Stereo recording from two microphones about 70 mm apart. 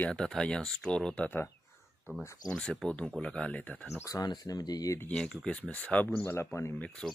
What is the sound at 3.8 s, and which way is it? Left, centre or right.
Speech, left.